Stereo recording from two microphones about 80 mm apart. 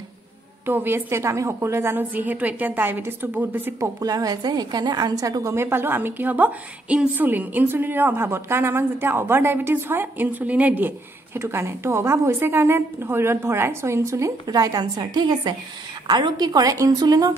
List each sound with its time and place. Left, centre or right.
0.7 s a woman's voice: right
4.0 s a woman's voice: right
11.3 s a woman's voice: right
14.4 s a woman's voice: right